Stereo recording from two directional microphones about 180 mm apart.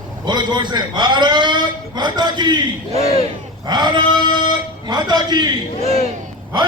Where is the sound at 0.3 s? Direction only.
25° right (ahead or behind).